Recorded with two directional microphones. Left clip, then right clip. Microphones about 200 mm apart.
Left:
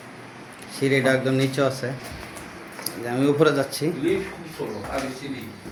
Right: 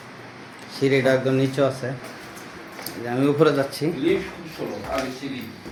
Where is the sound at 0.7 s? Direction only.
5° right (ahead or behind).